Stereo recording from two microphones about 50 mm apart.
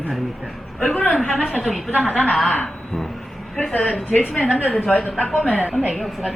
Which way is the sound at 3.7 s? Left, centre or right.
Left.